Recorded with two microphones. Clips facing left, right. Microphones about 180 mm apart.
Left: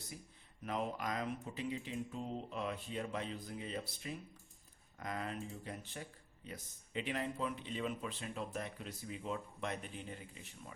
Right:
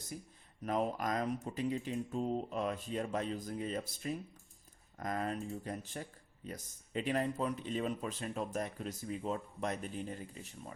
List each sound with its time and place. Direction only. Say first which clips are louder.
0.6 s speech: right 5 dB; 45° right (ahead or behind)